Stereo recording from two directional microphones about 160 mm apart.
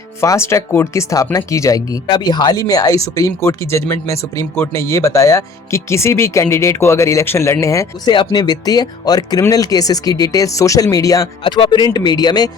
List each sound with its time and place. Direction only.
0.2 s speech: 15° left (ahead or behind)